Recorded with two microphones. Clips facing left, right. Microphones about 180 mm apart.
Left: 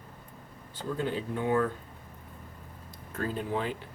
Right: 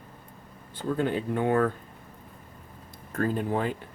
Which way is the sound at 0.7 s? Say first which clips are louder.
Right 5 dB; 55° right (ahead or behind).